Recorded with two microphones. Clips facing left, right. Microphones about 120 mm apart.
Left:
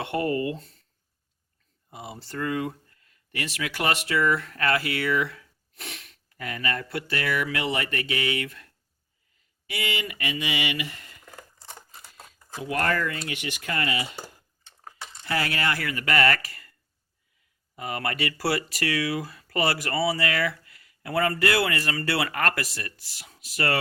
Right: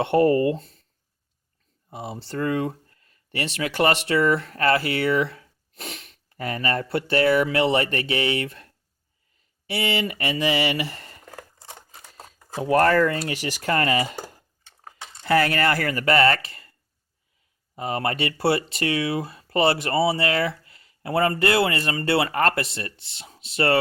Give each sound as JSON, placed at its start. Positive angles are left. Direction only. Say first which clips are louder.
{"t": 0.0, "sound": "speech", "louder": "right 8 dB", "side_deg": -30}
{"t": 1.9, "sound": "speech", "louder": "right 5 dB", "side_deg": -30}
{"t": 6.3, "sound": "speech", "louder": "right 5 dB", "side_deg": -35}
{"t": 17.7, "sound": "speech", "louder": "right 4 dB", "side_deg": -30}